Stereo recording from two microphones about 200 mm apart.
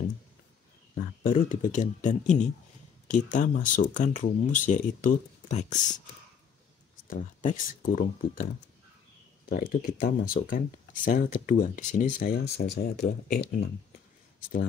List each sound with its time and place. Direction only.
1.2 s speech: 40° left (ahead or behind)
7.1 s speech: 40° left (ahead or behind)
9.5 s speech: 45° left (ahead or behind)